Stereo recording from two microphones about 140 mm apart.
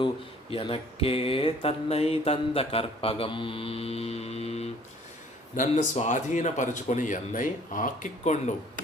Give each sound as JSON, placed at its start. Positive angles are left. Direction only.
{"t": 0.5, "sound": "speech", "side_deg": 40}
{"t": 5.5, "sound": "speech", "side_deg": 60}